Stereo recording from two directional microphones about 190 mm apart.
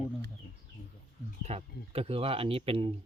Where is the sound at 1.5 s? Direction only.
30° right (ahead or behind).